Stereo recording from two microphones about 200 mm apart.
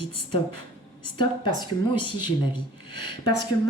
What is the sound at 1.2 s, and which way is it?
Speech, 20° left (ahead or behind).